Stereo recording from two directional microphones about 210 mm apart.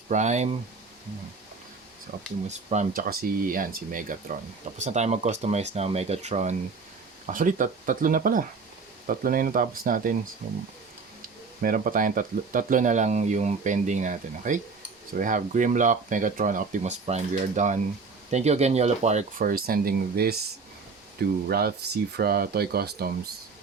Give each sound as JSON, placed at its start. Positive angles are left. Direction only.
{"t": 0.1, "sound": "speech", "side_deg": -35}
{"t": 2.5, "sound": "speech", "side_deg": -35}
{"t": 11.6, "sound": "speech", "side_deg": -40}